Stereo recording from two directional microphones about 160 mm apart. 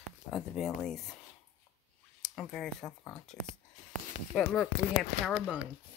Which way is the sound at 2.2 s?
5° left (ahead or behind).